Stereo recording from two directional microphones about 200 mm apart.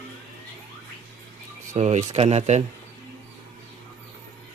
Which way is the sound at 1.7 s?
35° right (ahead or behind).